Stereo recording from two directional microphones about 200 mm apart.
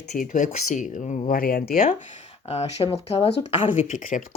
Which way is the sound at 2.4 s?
30° left (ahead or behind).